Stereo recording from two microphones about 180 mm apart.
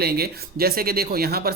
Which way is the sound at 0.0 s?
60° right (ahead or behind).